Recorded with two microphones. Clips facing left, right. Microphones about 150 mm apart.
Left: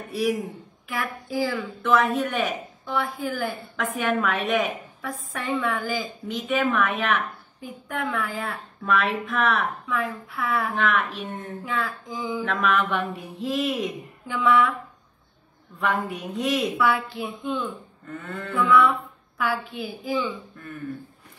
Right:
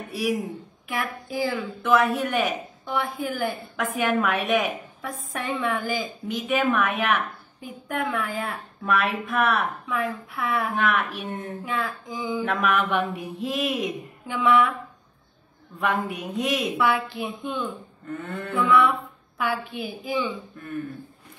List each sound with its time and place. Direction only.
0.8 s speech: 20° right (ahead or behind)
15.8 s a woman's voice: 15° right (ahead or behind)